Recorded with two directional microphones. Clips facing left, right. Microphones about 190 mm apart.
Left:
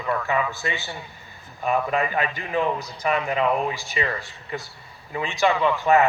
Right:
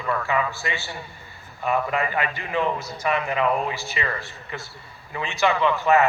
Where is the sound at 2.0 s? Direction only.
15° left (ahead or behind).